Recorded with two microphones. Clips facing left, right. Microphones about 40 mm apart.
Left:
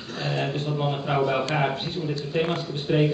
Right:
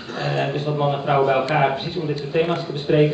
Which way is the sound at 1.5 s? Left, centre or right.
Right.